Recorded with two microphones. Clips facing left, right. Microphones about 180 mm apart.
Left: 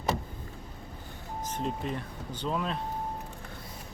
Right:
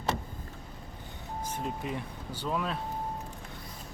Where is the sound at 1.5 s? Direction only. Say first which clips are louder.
Left 2 dB; 10° right (ahead or behind).